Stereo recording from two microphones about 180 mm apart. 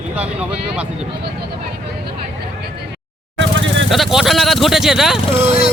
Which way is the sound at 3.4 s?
90° right.